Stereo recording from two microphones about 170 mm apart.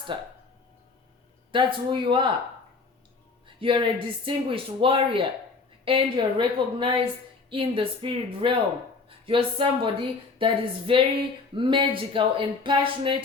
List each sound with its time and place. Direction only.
0.1 s speech: 30° right (ahead or behind)
1.5 s speech: 30° right (ahead or behind)
3.4 s music: 30° right (ahead or behind)
4.3 s a woman's voice: 30° right (ahead or behind)